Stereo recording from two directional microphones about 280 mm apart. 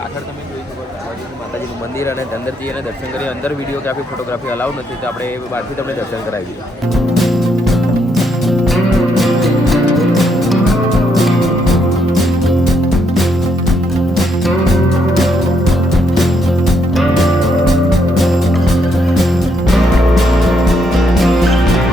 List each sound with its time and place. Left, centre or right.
3.2 s speech: centre
6.9 s music: centre